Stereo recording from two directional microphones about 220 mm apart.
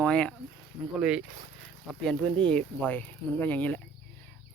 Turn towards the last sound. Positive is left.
turn(degrees=10)  # may be behind; listen again after turning